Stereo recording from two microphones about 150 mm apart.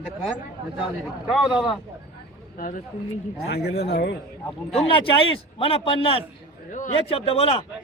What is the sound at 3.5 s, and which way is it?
Speech, 90° left.